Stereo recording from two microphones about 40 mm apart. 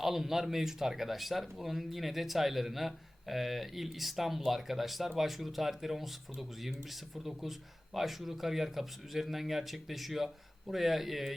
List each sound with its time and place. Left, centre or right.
0.0 s speech: centre
7.9 s speech: centre